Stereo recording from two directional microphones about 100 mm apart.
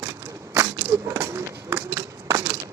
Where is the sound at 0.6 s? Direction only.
30° right (ahead or behind).